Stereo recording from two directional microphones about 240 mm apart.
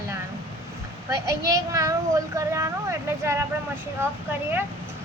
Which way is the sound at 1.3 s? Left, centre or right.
Centre.